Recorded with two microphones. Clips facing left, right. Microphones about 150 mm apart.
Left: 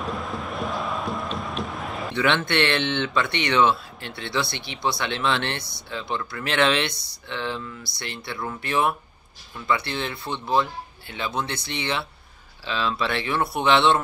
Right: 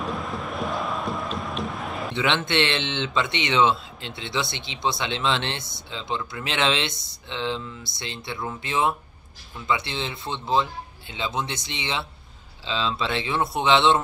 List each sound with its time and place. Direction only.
0.0 s music: centre (ahead or behind)
2.1 s speech: 20° right (ahead or behind)